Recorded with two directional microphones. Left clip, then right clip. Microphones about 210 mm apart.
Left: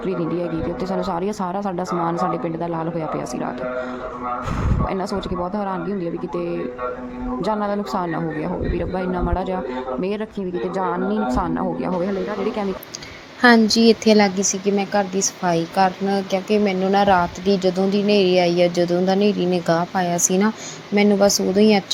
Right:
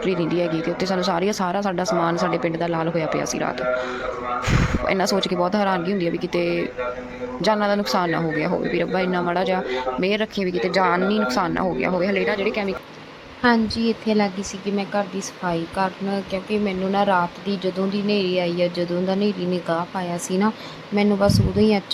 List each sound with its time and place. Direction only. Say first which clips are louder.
0.0 s speech: right 2 dB; 5° left (ahead or behind)
4.9 s speech: right 6 dB; 5° left (ahead or behind)
13.4 s speech: left 6 dB; 20° left (ahead or behind)
15.4 s speech: left 5 dB; 10° left (ahead or behind)